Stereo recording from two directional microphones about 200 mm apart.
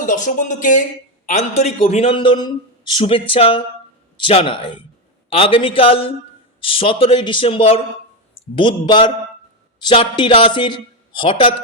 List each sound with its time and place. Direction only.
0.0 s a man's voice: 40° left (ahead or behind)